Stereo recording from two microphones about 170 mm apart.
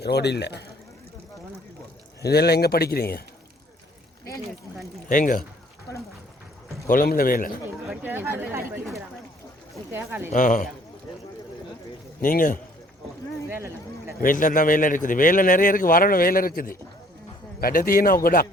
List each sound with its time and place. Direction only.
0.0 s speech: 75° left (ahead or behind)
2.2 s speech: 70° left (ahead or behind)
5.0 s a man's voice: 50° left (ahead or behind)
6.8 s a man's voice: 55° left (ahead or behind)
7.9 s speech: 10° right (ahead or behind)
9.9 s speech: 15° right (ahead or behind)
10.2 s a man's voice: 50° left (ahead or behind)
12.2 s a man's voice: 55° left (ahead or behind)
14.2 s a man's voice: 55° left (ahead or behind)